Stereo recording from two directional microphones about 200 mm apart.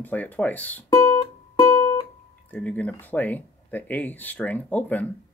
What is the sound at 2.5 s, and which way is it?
Speech, 5° left (ahead or behind).